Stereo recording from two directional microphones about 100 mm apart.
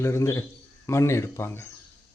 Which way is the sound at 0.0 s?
25° left (ahead or behind).